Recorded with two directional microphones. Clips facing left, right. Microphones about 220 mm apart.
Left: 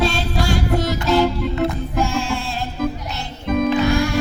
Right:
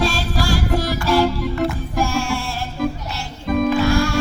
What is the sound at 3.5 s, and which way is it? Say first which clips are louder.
Music: even; centre (ahead or behind).